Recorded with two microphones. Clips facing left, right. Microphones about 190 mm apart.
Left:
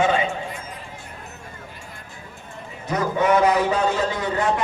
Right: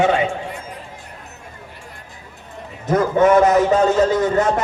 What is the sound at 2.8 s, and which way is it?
A man's voice, 50° right (ahead or behind).